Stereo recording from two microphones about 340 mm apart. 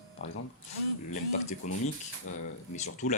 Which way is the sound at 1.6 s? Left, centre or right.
Left.